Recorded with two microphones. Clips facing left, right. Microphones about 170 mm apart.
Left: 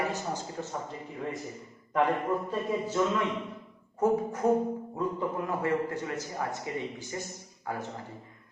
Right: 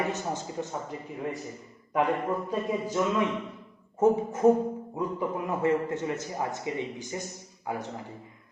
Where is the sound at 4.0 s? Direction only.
25° right (ahead or behind).